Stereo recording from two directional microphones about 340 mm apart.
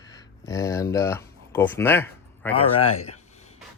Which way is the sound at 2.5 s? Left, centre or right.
Centre.